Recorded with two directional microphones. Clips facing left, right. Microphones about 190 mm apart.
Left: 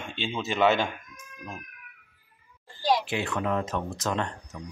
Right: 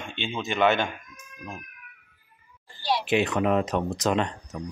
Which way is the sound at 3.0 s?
20° right (ahead or behind).